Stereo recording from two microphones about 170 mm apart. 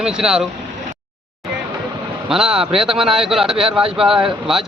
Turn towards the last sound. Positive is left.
turn(degrees=-5)  # may be behind; listen again after turning